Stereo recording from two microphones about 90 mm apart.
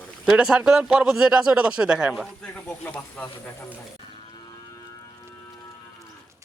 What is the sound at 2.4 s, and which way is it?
Speech, 15° left (ahead or behind).